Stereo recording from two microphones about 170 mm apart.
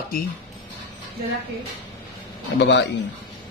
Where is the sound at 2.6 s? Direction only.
90° left.